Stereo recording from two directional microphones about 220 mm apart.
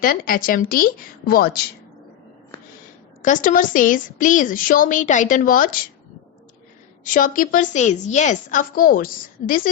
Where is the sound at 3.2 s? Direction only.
35° left (ahead or behind).